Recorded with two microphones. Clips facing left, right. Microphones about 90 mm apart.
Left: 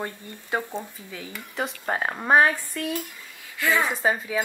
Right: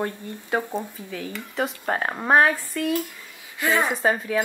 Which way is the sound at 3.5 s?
20° right (ahead or behind).